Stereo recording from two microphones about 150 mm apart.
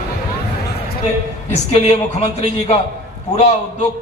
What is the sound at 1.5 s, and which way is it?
A man's voice, 45° left (ahead or behind).